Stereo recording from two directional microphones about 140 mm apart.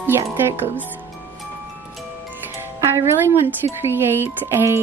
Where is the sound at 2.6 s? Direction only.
15° right (ahead or behind).